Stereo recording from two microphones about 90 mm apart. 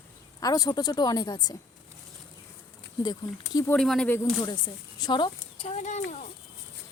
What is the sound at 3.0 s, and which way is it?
Speech, 50° left (ahead or behind).